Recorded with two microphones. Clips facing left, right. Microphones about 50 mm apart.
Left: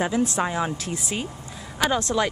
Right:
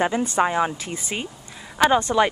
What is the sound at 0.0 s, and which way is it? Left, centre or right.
Speech, centre.